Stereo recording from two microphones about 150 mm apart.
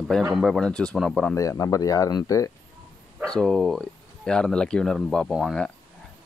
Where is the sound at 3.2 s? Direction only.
5° left (ahead or behind).